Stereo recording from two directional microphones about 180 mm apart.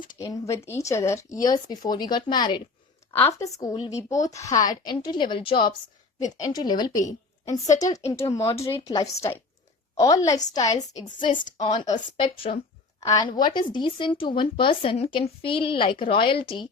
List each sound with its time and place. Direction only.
0.2 s a woman's voice: 20° left (ahead or behind)
11.3 s a woman's voice: 45° left (ahead or behind)
11.6 s speech: 25° left (ahead or behind)